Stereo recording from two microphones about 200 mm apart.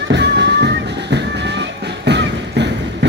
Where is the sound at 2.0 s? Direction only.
60° right (ahead or behind).